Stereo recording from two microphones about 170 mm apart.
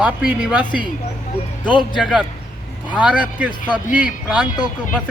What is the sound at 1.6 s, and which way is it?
Speech, 30° left (ahead or behind).